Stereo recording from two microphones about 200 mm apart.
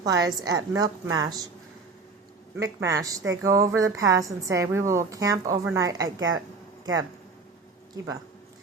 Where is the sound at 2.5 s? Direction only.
15° right (ahead or behind).